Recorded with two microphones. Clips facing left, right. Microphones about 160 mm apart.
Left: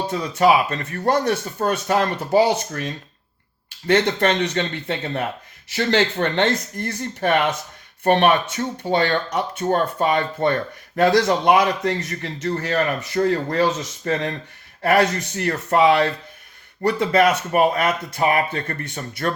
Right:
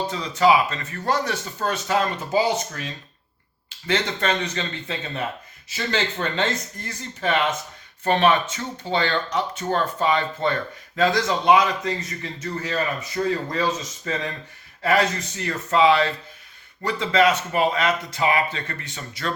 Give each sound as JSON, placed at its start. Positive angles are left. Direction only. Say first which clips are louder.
{"t": 0.1, "sound": "speech", "louder": "left 2 dB", "side_deg": 55}
{"t": 14.0, "sound": "speech", "louder": "left 8 dB", "side_deg": 55}